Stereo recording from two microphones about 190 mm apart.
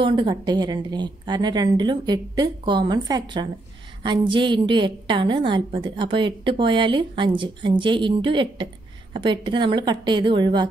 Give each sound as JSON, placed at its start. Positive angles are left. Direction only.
{"t": 0.0, "sound": "a woman's voice", "side_deg": -25}